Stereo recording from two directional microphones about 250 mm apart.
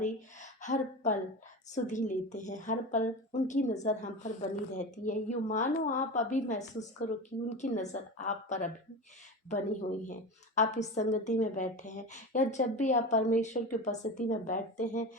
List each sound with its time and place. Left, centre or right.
0.6 s a woman's voice: left
10.1 s a woman's voice: left